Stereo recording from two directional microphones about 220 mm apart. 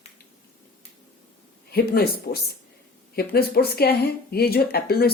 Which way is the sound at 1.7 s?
45° left (ahead or behind).